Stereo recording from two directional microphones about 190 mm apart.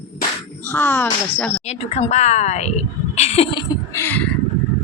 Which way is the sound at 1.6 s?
35° left (ahead or behind).